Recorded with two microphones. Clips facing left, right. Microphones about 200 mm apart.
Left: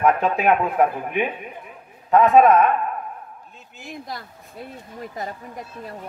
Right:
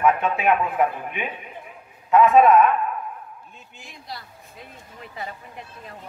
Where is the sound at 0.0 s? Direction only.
35° left (ahead or behind).